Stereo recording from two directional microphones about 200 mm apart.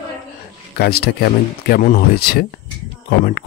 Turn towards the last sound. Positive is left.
turn(degrees=50)  # may be behind; listen again after turning